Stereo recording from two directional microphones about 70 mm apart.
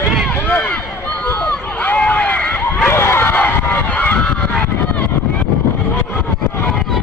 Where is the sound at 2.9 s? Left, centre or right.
Left.